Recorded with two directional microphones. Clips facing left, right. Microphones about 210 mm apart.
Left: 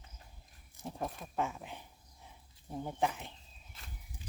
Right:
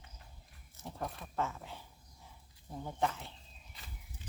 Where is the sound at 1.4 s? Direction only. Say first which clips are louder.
Left 1 dB; 15° left (ahead or behind).